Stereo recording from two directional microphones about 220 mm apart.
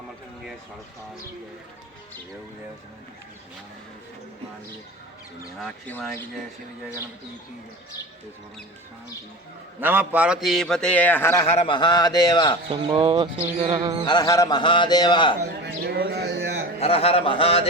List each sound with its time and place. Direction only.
5.6 s a man's voice: centre (ahead or behind)
9.8 s a man's voice: 10° right (ahead or behind); by 11.4 s 10° left (ahead or behind)
11.4 s a man's voice: 25° left (ahead or behind)
12.6 s a sound: 25° right (ahead or behind)
14.1 s a man's voice: 15° left (ahead or behind)
15.4 s speech: 50° right (ahead or behind)
16.8 s a man's voice: 25° left (ahead or behind)